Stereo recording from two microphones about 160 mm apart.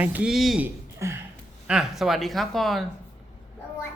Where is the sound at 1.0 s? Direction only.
15° right (ahead or behind).